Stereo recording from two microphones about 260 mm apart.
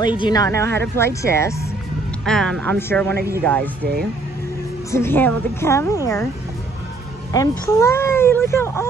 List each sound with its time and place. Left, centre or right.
0.2 s speech: centre
3.8 s speech: right
4.9 s speech: centre
7.3 s speech: centre